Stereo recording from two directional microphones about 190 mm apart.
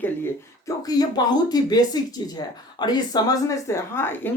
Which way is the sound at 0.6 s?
20° left (ahead or behind).